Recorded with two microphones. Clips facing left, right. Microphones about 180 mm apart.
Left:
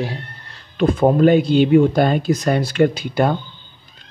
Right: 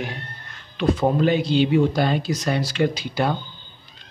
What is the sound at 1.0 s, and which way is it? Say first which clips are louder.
Speech: left 9 dB; 50° left (ahead or behind).